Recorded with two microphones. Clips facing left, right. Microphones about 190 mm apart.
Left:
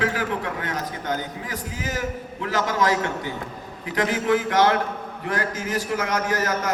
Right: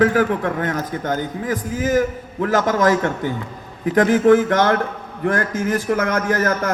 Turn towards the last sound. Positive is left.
turn(degrees=-50)  # may be behind; listen again after turning